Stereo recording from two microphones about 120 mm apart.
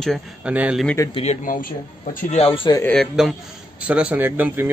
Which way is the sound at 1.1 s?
65° left (ahead or behind).